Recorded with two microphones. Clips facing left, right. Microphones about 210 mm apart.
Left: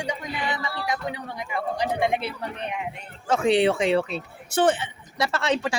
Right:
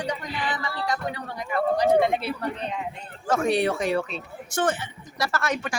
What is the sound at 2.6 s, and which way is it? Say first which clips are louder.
Speech: even; 15° left (ahead or behind).